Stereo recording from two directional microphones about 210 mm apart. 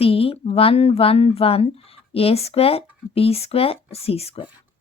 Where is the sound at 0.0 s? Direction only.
25° left (ahead or behind).